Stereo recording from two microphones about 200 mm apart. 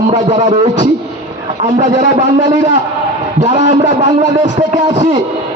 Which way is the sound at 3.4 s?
40° right (ahead or behind).